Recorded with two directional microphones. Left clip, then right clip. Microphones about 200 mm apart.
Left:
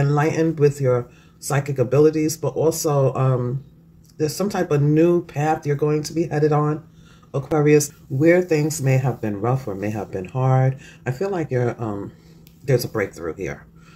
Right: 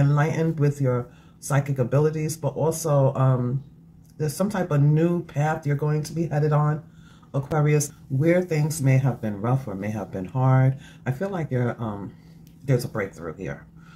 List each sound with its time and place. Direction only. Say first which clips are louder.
0.0 s speech: left 5 dB; 35° left (ahead or behind)